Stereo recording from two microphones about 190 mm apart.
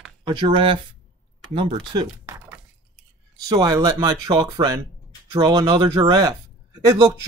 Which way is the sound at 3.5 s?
20° right (ahead or behind).